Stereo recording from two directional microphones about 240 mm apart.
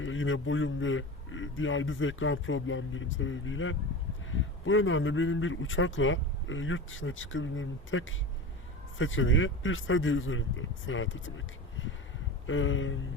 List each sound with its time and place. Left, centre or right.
0.0 s speech: left